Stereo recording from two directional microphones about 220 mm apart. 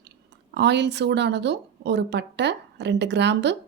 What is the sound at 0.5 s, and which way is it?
A woman's voice, 50° right (ahead or behind).